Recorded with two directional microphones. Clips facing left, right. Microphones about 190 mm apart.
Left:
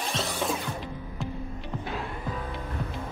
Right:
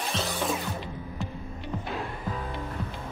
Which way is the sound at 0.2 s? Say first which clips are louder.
Even; centre (ahead or behind).